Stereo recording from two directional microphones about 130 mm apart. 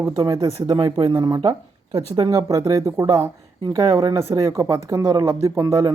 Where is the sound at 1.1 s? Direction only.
35° right (ahead or behind).